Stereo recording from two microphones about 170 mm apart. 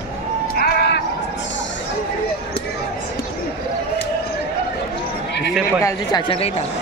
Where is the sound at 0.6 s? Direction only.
70° left (ahead or behind).